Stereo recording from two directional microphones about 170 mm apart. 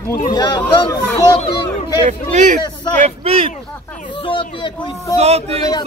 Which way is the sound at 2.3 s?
45° right (ahead or behind).